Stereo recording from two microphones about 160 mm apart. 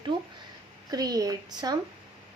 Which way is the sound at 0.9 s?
25° right (ahead or behind).